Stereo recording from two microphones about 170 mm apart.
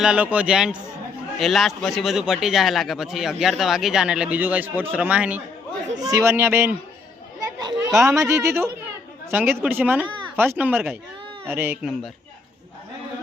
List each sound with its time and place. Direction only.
0.0 s a man's voice: 5° right (ahead or behind)
6.0 s speech: 20° right (ahead or behind)
7.9 s speech: centre (ahead or behind)
8.1 s speech: 15° right (ahead or behind)